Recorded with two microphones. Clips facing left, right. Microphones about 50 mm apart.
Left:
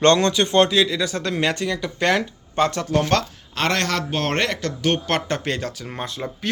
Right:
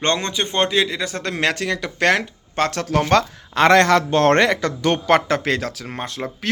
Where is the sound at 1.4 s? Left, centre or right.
Right.